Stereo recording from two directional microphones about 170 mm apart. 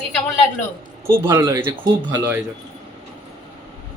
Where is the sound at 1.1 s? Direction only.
15° right (ahead or behind).